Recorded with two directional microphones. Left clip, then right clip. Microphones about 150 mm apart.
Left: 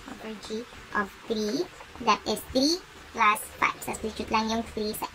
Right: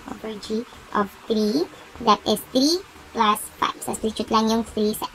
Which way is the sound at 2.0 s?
15° right (ahead or behind).